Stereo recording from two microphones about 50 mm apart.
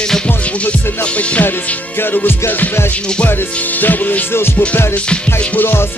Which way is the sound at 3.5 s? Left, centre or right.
Left.